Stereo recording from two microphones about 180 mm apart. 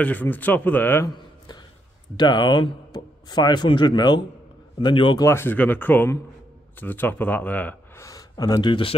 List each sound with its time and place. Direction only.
0.0 s speech: 10° left (ahead or behind)
2.1 s speech: 25° left (ahead or behind)